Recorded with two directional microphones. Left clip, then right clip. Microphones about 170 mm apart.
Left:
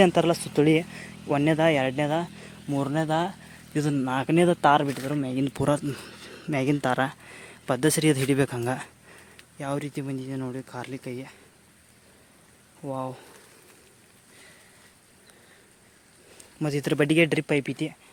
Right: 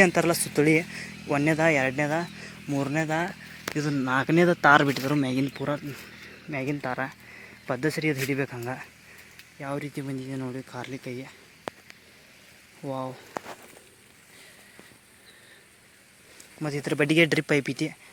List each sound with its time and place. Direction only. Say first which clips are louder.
0.0 s speech: left 1 dB; 10° left (ahead or behind)
4.0 s speech: right 1 dB; centre (ahead or behind)
4.8 s speech: right 3 dB; 20° right (ahead or behind)
5.5 s a man's voice: left 5 dB; 30° left (ahead or behind)
9.6 s speech: left 2 dB; 20° left (ahead or behind)
12.8 s speech: left 1 dB; centre (ahead or behind)
16.6 s speech: left 3 dB; 35° left (ahead or behind)
17.0 s speech: right 1 dB; 10° left (ahead or behind)